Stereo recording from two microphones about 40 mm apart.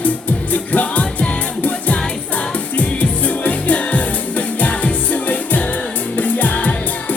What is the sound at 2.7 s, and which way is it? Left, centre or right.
Music, left.